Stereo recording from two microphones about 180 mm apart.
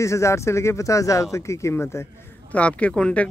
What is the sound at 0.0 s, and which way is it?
Speech, 15° left (ahead or behind).